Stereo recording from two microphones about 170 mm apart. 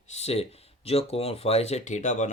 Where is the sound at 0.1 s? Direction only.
40° left (ahead or behind).